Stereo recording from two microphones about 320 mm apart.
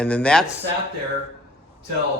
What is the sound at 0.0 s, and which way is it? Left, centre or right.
Speech, centre.